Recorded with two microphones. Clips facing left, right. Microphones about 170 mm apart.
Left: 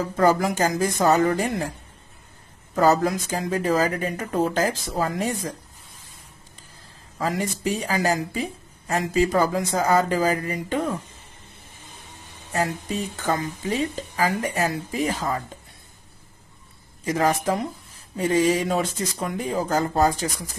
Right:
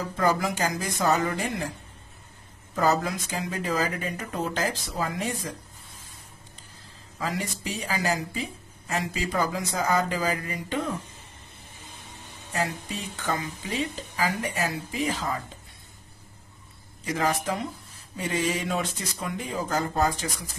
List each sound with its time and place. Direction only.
0.2 s speech: 45° left (ahead or behind)
2.7 s speech: 45° left (ahead or behind)
7.2 s speech: 45° left (ahead or behind)
12.5 s speech: 45° left (ahead or behind)
17.0 s speech: 45° left (ahead or behind)